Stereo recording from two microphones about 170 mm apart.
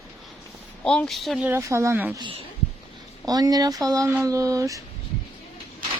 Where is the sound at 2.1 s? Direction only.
30° right (ahead or behind).